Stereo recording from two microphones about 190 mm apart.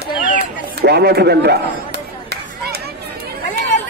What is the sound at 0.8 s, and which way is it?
Speech, 55° right (ahead or behind).